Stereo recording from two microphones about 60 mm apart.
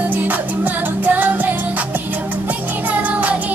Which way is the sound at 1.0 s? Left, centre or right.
Right.